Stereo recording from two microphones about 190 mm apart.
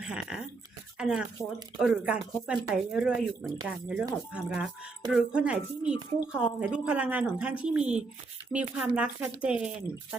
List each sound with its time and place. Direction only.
0.0 s speech: 5° right (ahead or behind)